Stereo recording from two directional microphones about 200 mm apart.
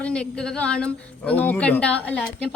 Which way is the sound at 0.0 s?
5° left (ahead or behind).